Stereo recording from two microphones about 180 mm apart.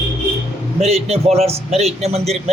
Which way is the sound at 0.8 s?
35° right (ahead or behind).